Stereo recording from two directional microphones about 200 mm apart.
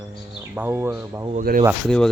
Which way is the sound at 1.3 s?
40° right (ahead or behind).